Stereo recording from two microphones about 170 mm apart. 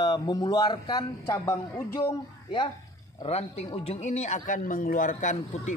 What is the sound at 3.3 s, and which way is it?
A man's voice, 40° left (ahead or behind).